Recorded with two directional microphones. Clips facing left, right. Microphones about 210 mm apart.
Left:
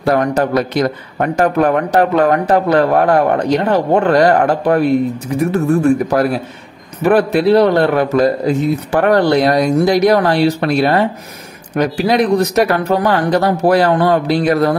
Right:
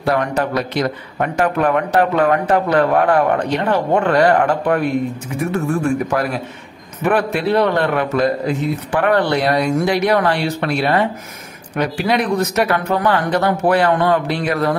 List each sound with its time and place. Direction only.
0.0 s a man's voice: 40° left (ahead or behind)